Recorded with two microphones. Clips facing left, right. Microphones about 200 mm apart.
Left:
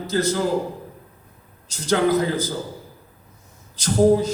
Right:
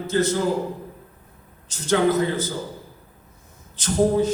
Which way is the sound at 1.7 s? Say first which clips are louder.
Even; 35° left (ahead or behind).